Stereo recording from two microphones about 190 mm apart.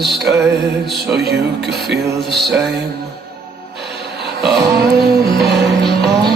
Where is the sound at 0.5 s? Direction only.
60° right (ahead or behind).